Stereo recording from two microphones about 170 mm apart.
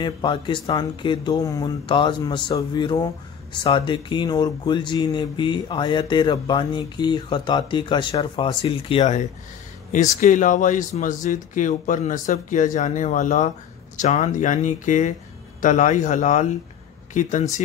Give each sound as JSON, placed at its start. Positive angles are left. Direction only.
{"t": 0.0, "sound": "speech", "side_deg": 30}
{"t": 9.9, "sound": "speech", "side_deg": 50}